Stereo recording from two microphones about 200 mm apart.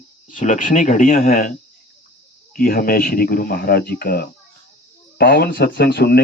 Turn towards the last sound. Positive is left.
turn(degrees=55)  # may be behind; listen again after turning